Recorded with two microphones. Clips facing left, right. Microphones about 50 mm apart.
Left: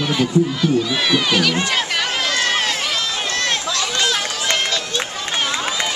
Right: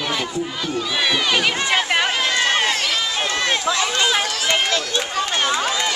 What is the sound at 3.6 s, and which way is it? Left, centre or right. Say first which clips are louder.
Run: right 1 dB; centre.